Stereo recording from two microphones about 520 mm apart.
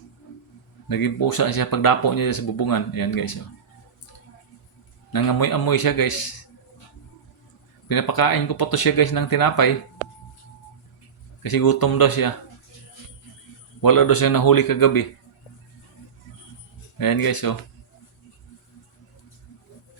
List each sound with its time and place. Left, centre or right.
0.9 s speech: left
5.1 s speech: left
7.9 s speech: left
11.4 s speech: left
13.8 s speech: left
17.0 s speech: left